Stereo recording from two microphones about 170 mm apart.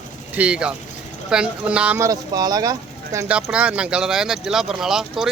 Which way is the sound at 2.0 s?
20° right (ahead or behind).